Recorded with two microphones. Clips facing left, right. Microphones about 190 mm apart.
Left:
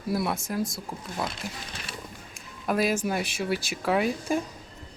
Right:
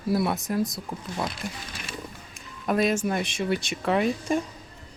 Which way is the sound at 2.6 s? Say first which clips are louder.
Right 2 dB; 5° left (ahead or behind).